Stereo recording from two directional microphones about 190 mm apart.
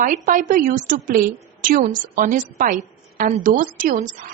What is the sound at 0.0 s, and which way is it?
A woman's voice, 45° right (ahead or behind).